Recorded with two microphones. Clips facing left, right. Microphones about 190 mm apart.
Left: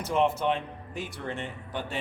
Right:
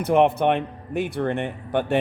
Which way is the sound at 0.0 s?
60° right (ahead or behind).